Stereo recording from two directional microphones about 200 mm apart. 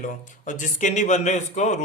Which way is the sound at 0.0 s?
40° left (ahead or behind).